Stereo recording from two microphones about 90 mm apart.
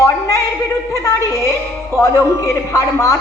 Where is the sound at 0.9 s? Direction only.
35° left (ahead or behind).